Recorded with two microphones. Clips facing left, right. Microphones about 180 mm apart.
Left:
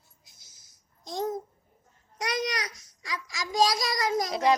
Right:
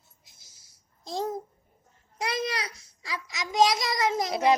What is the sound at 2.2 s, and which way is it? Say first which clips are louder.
A child's voice: even; 30° right (ahead or behind).